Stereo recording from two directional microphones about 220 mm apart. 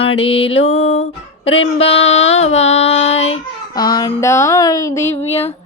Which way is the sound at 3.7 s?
20° left (ahead or behind).